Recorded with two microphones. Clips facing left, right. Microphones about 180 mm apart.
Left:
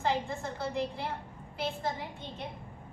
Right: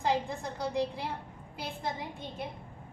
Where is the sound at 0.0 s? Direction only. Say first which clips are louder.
Right 1 dB; 15° right (ahead or behind).